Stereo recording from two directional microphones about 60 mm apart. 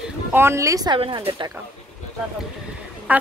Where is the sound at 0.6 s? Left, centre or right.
Right.